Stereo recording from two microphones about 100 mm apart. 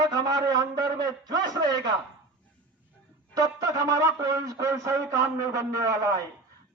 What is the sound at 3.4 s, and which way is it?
Speech, 35° right (ahead or behind).